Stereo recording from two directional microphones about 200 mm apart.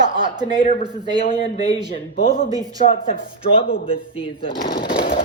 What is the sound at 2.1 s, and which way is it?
Speech, 45° left (ahead or behind).